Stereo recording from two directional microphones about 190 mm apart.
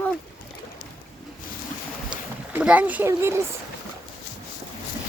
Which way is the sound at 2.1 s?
5° right (ahead or behind).